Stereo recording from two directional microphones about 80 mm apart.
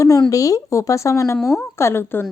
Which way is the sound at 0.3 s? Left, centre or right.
Left.